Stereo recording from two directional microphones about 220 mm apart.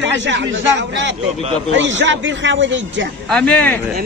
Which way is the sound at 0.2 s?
55° right (ahead or behind).